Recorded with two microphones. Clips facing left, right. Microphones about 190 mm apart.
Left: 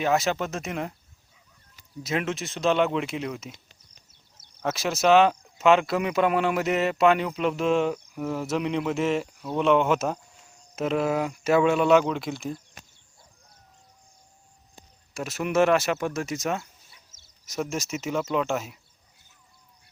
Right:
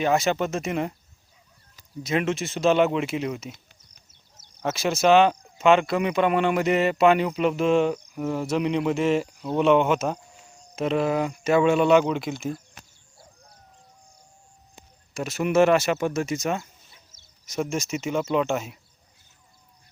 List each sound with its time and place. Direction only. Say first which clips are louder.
0.0 s speech: right 2 dB; centre (ahead or behind)
2.0 s speech: right 3 dB; centre (ahead or behind)
4.6 s speech: right 2 dB; centre (ahead or behind)
15.1 s speech: right 3 dB; centre (ahead or behind)